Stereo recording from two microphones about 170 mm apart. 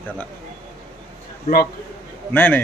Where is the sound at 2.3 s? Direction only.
10° left (ahead or behind).